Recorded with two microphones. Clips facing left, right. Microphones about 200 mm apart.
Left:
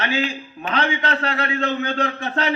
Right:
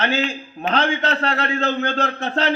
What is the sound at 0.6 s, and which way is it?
A man's voice, 45° right (ahead or behind).